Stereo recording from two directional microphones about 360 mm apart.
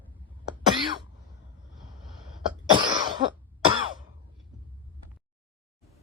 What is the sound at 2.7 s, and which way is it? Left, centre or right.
Cough, centre.